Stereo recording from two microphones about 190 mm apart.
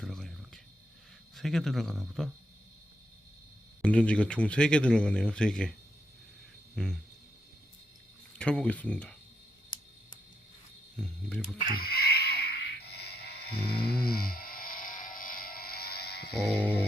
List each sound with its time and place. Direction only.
0.0 s a sound: 5° left (ahead or behind)
1.4 s speech: centre (ahead or behind)
3.8 s speech: 5° left (ahead or behind)
6.7 s speech: centre (ahead or behind)
8.4 s speech: 5° left (ahead or behind)
10.9 s speech: 5° left (ahead or behind)
11.7 s music: 50° left (ahead or behind)